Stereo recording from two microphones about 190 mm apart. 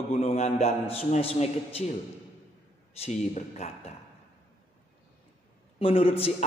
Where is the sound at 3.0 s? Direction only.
40° left (ahead or behind).